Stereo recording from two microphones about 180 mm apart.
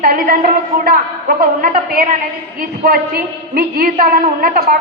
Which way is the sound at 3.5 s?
55° right (ahead or behind).